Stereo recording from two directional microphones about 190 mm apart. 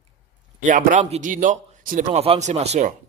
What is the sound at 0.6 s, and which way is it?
Speech, 45° right (ahead or behind).